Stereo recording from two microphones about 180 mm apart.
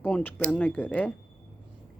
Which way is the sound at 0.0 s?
10° left (ahead or behind).